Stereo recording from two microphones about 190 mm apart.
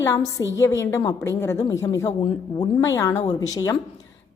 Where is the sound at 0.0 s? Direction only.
15° left (ahead or behind).